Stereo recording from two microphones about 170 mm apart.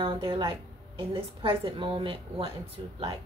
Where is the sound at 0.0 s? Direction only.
30° right (ahead or behind).